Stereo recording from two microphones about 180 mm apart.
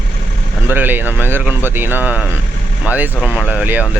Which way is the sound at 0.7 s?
10° right (ahead or behind).